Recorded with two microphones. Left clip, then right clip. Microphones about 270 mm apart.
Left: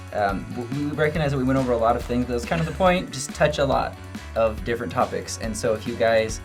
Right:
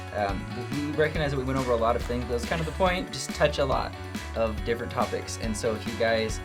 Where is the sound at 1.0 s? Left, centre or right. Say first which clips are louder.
Left 3 dB; right.